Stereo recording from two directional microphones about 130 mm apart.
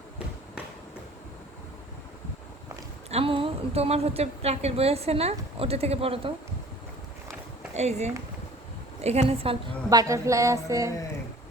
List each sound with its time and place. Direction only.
3.1 s a woman's voice: 50° right (ahead or behind)
7.7 s a woman's voice: 60° right (ahead or behind)
9.9 s a sound: 25° right (ahead or behind)